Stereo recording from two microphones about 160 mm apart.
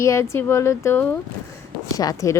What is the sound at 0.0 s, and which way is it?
A woman's voice, 15° left (ahead or behind).